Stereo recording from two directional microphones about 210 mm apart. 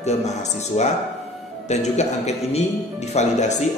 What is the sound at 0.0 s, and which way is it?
Speech, 30° left (ahead or behind).